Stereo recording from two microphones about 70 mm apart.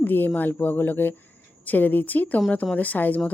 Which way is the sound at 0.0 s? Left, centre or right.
Left.